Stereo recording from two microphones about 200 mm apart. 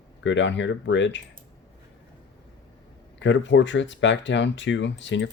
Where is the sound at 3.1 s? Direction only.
65° left (ahead or behind).